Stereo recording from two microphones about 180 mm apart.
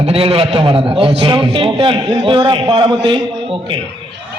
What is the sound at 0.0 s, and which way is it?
A man's voice, 35° right (ahead or behind).